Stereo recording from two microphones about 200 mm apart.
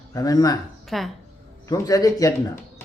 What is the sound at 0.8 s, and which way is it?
Speech, centre (ahead or behind).